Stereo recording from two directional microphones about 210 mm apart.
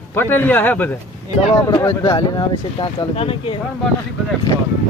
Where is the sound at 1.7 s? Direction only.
20° left (ahead or behind).